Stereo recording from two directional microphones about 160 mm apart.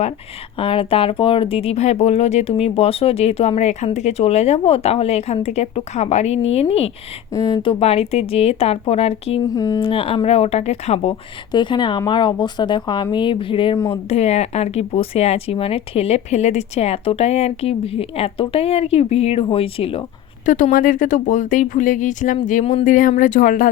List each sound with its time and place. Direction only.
0.6 s speech: 35° left (ahead or behind)
7.3 s a woman's voice: 25° left (ahead or behind)
7.7 s speech: 40° left (ahead or behind)
9.4 s a woman's voice: 25° left (ahead or behind)
9.9 s speech: 35° left (ahead or behind)
11.5 s a woman's voice: 30° left (ahead or behind)
20.4 s speech: 55° left (ahead or behind)